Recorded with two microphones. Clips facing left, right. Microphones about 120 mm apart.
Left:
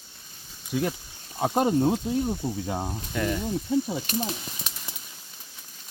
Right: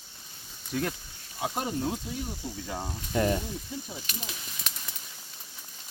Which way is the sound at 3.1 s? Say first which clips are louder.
Right 2 dB; 30° right (ahead or behind).